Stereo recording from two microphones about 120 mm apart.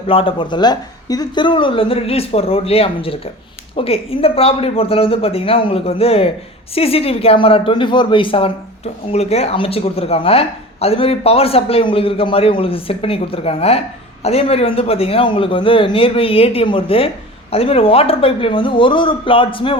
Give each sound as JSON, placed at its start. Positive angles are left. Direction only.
{"t": 0.1, "sound": "speech", "side_deg": 50}